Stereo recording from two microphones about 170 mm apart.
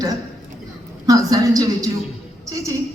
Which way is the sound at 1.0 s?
20° right (ahead or behind).